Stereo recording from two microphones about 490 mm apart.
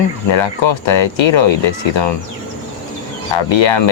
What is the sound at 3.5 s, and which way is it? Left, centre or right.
Speech, left.